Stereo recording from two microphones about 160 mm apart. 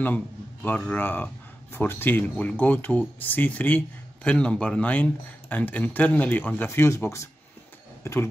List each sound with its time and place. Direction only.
0.0 s speech: 10° left (ahead or behind)